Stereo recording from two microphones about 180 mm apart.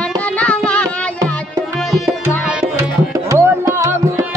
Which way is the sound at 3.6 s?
20° right (ahead or behind).